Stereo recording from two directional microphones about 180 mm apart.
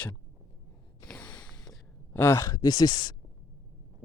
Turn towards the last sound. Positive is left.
turn(degrees=25)  # may be behind; listen again after turning